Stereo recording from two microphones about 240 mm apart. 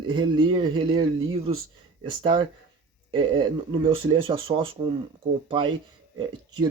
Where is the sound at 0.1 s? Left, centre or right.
Centre.